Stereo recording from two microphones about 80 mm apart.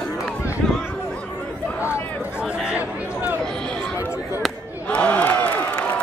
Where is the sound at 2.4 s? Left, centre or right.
Centre.